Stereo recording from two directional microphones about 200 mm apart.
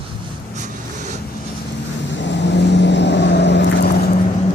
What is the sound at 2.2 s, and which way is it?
Vehicle, 60° left (ahead or behind).